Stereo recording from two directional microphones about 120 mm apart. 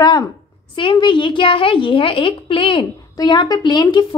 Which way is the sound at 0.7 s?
45° left (ahead or behind).